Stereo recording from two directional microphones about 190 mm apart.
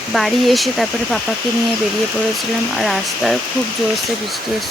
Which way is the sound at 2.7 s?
Centre (ahead or behind).